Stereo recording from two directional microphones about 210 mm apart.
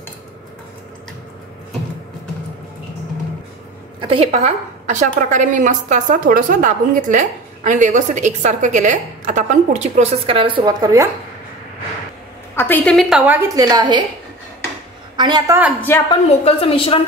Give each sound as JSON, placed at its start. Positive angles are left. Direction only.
{"t": 4.0, "sound": "a woman's voice", "side_deg": -25}
{"t": 12.5, "sound": "a woman's voice", "side_deg": 10}
{"t": 15.1, "sound": "a woman's voice", "side_deg": -20}
{"t": 16.1, "sound": "a woman's voice", "side_deg": 25}